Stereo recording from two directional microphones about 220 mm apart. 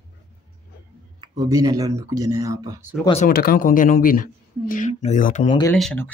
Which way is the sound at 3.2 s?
40° left (ahead or behind).